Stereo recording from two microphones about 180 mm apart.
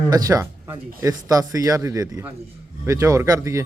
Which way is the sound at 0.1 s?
20° right (ahead or behind).